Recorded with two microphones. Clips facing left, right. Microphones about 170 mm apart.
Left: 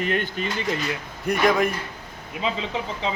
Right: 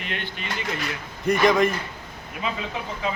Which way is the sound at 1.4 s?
5° left (ahead or behind).